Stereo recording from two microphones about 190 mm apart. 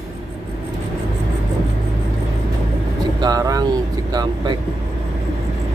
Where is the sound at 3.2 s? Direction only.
20° right (ahead or behind).